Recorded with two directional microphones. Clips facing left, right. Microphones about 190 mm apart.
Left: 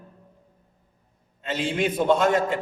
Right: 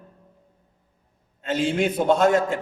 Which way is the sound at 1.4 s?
45° right (ahead or behind).